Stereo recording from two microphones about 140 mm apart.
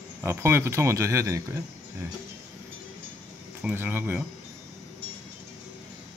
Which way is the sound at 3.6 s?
10° right (ahead or behind).